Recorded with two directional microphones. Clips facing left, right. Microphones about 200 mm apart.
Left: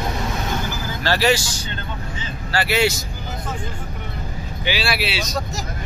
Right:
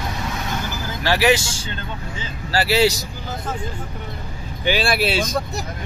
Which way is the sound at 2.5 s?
35° right (ahead or behind).